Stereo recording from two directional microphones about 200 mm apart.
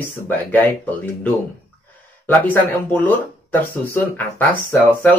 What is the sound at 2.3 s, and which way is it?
Speech, 10° left (ahead or behind).